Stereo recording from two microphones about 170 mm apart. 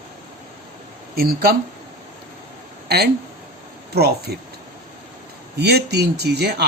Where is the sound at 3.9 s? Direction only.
70° right (ahead or behind).